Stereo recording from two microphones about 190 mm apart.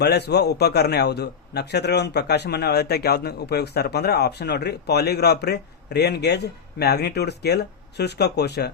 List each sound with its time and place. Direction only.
0.0 s a man's voice: 60° left (ahead or behind)